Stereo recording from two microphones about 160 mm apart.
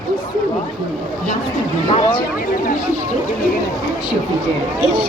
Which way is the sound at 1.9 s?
30° left (ahead or behind).